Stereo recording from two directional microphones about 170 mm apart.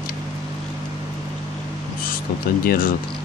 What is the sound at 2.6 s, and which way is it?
Speech, 60° left (ahead or behind).